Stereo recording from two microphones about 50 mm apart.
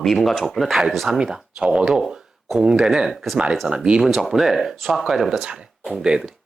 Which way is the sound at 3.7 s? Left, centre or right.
Centre.